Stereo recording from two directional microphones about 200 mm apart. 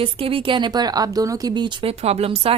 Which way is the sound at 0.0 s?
25° right (ahead or behind).